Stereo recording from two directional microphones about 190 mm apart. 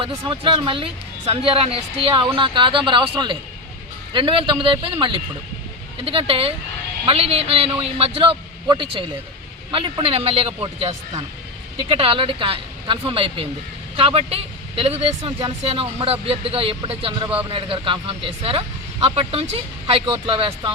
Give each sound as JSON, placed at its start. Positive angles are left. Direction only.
{"t": 0.0, "sound": "speech", "side_deg": -25}